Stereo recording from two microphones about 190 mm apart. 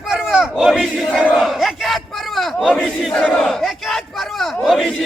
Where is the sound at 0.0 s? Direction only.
Centre (ahead or behind).